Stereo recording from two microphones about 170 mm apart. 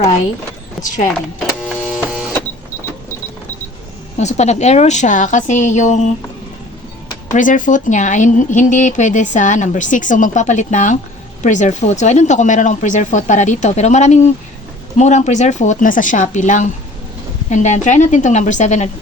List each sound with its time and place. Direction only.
1.6 s printer: centre (ahead or behind)
4.2 s speech: 40° left (ahead or behind)
7.3 s speech: 50° left (ahead or behind)